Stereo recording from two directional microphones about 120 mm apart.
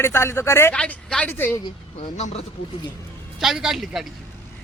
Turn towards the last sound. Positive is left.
turn(degrees=0)  # may be behind; listen again after turning